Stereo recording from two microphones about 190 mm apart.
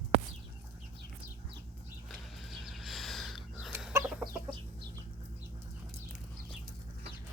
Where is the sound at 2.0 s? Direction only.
Centre (ahead or behind).